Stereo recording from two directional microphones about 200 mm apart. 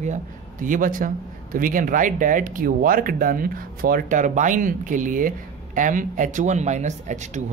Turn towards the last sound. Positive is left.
turn(degrees=-35)  # may be behind; listen again after turning